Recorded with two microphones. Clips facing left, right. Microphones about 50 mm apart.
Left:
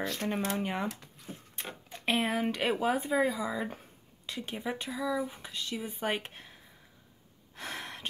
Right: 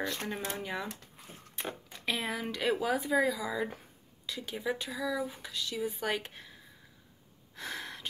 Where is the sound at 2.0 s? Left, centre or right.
Left.